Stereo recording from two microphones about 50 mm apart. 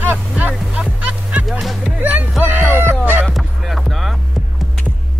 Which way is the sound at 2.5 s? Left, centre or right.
Right.